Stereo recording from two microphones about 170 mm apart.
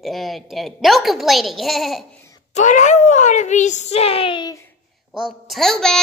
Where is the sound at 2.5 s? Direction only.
45° left (ahead or behind); by 4.6 s 25° left (ahead or behind).